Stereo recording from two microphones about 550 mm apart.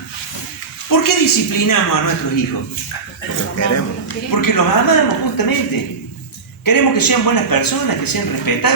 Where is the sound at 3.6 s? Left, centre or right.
Left.